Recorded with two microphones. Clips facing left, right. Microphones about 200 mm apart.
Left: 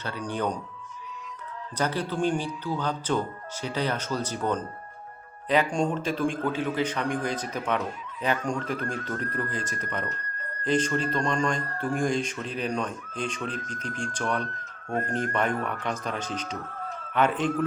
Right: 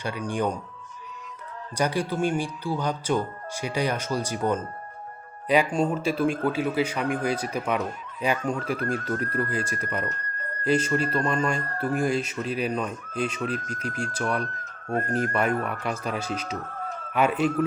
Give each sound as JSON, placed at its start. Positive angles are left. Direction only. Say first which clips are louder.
{"t": 0.0, "sound": "speech", "louder": "right 3 dB", "side_deg": -10}
{"t": 1.8, "sound": "speech", "louder": "right 2 dB", "side_deg": -10}
{"t": 8.8, "sound": "speech", "louder": "right 4 dB", "side_deg": -40}
{"t": 9.0, "sound": "speech", "louder": "right 4 dB", "side_deg": -10}
{"t": 11.6, "sound": "speech", "louder": "right 2 dB", "side_deg": -45}
{"t": 11.9, "sound": "speech", "louder": "right 1 dB", "side_deg": -5}
{"t": 14.6, "sound": "speech", "louder": "right 2 dB", "side_deg": -40}
{"t": 15.3, "sound": "speech", "louder": "right 2 dB", "side_deg": -10}
{"t": 16.6, "sound": "a sound", "louder": "right 2 dB", "side_deg": -45}
{"t": 17.1, "sound": "a man's voice", "louder": "right 2 dB", "side_deg": -10}